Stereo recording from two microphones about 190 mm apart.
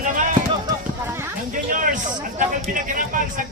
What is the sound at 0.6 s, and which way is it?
Clip-clop, 15° right (ahead or behind).